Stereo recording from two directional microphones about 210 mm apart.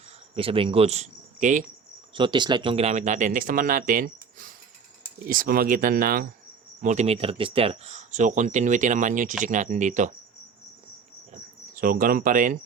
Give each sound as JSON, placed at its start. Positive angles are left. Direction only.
{"t": 0.3, "sound": "cricket", "side_deg": -25}
{"t": 2.1, "sound": "speech", "side_deg": -20}
{"t": 6.8, "sound": "speech", "side_deg": -30}
{"t": 11.7, "sound": "speech", "side_deg": -40}